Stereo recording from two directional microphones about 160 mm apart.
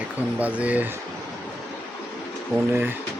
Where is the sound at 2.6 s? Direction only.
10° right (ahead or behind).